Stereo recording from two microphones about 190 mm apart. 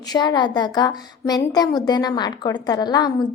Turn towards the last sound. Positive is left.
turn(degrees=20)  # may be behind; listen again after turning